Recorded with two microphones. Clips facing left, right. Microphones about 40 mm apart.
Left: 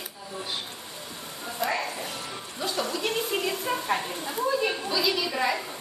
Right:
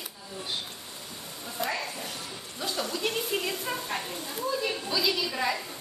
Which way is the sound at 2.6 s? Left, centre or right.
Centre.